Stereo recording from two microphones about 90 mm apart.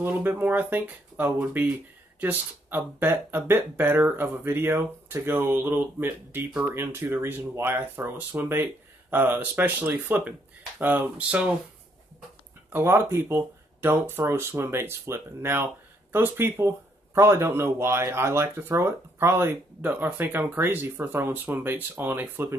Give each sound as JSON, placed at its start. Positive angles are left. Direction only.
{"t": 0.0, "sound": "speech", "side_deg": -25}
{"t": 12.7, "sound": "speech", "side_deg": -25}